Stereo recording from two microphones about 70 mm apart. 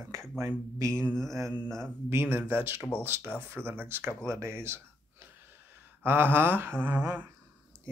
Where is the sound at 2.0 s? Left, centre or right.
Right.